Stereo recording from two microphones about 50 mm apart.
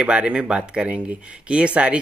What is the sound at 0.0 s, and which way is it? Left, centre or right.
Speech, right.